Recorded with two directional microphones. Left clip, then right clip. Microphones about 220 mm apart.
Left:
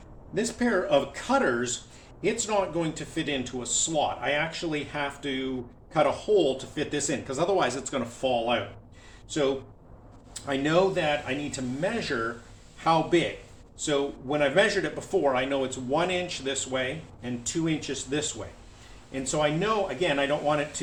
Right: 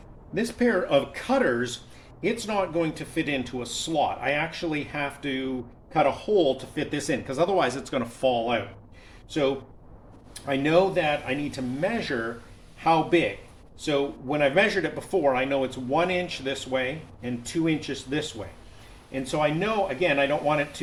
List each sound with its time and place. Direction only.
0.3 s speech: 35° right (ahead or behind)
10.4 s speech: 25° right (ahead or behind)